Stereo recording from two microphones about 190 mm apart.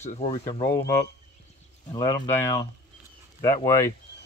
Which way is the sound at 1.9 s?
20° left (ahead or behind).